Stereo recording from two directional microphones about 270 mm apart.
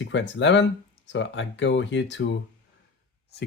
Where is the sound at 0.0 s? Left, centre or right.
Left.